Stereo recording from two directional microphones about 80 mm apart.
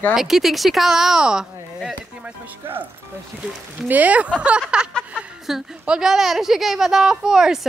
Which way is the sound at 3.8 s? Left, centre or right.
Centre.